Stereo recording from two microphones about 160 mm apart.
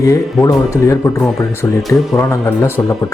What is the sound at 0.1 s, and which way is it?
A man's voice, 20° left (ahead or behind).